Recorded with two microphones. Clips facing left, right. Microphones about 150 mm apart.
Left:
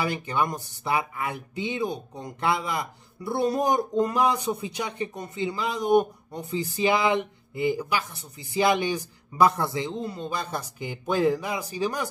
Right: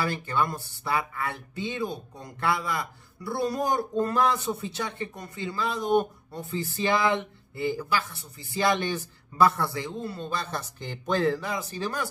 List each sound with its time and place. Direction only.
0.0 s speech: 15° left (ahead or behind)